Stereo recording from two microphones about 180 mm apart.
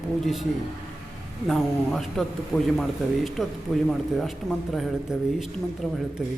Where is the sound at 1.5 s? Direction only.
Centre (ahead or behind).